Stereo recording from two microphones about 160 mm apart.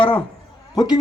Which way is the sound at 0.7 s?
25° left (ahead or behind).